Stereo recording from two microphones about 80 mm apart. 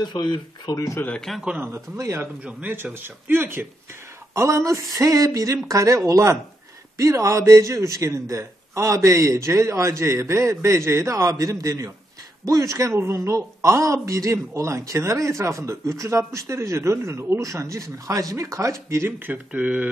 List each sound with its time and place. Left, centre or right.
0.0 s speech: left
0.7 s speech: left
1.4 s speech: centre
1.7 s speech: right
2.4 s a man's voice: right